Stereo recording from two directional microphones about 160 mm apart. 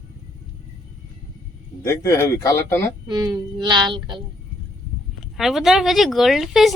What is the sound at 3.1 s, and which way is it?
Child singing, 25° right (ahead or behind).